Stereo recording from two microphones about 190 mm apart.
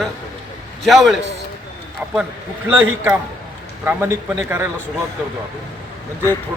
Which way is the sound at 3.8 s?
10° right (ahead or behind).